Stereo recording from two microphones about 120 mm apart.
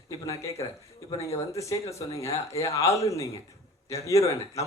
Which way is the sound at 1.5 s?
25° left (ahead or behind).